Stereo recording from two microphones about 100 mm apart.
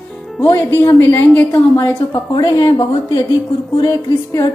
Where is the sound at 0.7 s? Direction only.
20° left (ahead or behind).